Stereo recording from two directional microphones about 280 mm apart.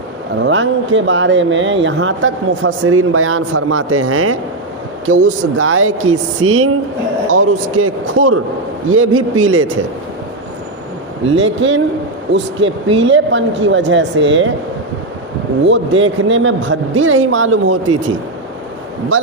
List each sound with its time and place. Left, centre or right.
0.4 s speech: right
11.3 s speech: right
15.6 s speech: right
19.1 s a man's voice: right